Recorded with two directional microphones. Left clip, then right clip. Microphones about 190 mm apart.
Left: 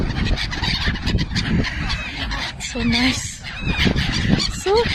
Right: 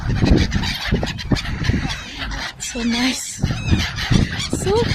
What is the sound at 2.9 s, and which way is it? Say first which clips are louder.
Speech: left 2 dB; centre (ahead or behind).